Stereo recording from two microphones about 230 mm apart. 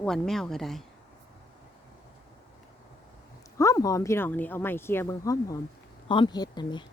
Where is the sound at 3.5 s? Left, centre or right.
Centre.